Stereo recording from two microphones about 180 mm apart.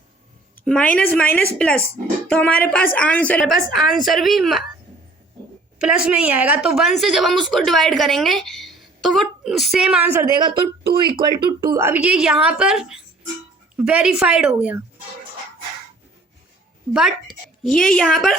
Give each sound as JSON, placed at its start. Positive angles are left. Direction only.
{"t": 0.6, "sound": "a woman's voice", "side_deg": 5}
{"t": 5.8, "sound": "a woman's voice", "side_deg": -5}
{"t": 11.0, "sound": "a woman's voice", "side_deg": -25}
{"t": 16.9, "sound": "a woman's voice", "side_deg": -5}